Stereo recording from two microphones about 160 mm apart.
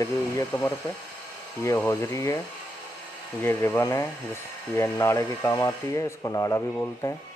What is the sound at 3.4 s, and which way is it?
Speech, 15° left (ahead or behind).